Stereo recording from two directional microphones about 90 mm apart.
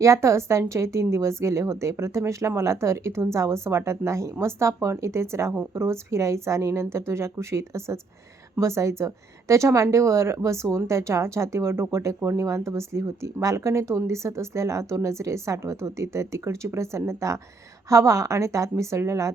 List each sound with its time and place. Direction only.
0.0 s a woman's voice: 35° right (ahead or behind)